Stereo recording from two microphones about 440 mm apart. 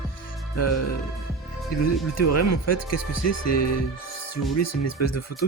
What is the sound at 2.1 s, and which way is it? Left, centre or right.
Speech, left.